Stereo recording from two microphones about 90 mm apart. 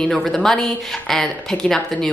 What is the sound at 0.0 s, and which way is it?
Speech, 5° left (ahead or behind).